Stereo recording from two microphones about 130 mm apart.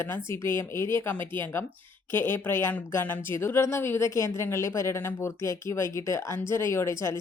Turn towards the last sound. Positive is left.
turn(degrees=20)  # may be behind; listen again after turning